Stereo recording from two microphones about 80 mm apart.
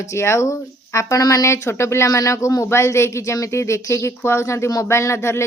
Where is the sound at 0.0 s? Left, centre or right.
Left.